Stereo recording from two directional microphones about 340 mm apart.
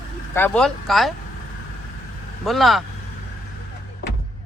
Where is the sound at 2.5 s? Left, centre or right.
Centre.